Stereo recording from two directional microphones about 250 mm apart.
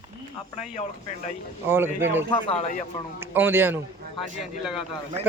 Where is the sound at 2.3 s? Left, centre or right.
Left.